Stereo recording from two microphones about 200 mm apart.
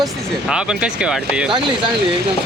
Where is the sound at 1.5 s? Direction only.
25° right (ahead or behind).